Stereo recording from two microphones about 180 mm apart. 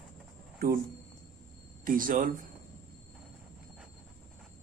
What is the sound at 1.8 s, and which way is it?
Speech, 50° right (ahead or behind).